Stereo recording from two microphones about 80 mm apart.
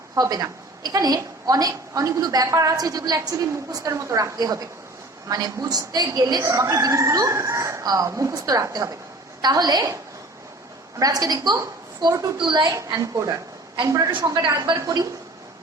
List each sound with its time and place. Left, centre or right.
0.1 s a woman's voice: right
6.4 s a woman's voice: right
11.0 s a woman's voice: right
12.0 s a woman's voice: right
13.0 s a woman's voice: right